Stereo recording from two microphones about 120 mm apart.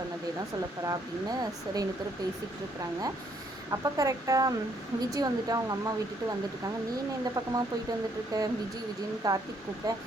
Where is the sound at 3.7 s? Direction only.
30° right (ahead or behind).